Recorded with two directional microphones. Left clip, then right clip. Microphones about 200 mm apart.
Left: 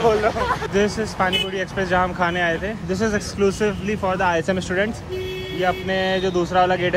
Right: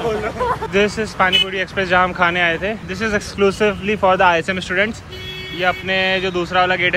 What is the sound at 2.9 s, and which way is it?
Speech, 20° left (ahead or behind).